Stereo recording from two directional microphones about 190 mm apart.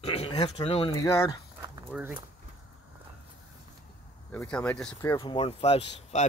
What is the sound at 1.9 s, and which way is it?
Speech, 5° right (ahead or behind).